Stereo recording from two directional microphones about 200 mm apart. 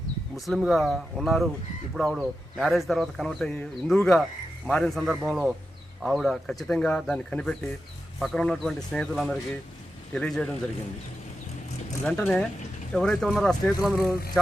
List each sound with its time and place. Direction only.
0.3 s speech: centre (ahead or behind)
12.0 s speech: 5° left (ahead or behind)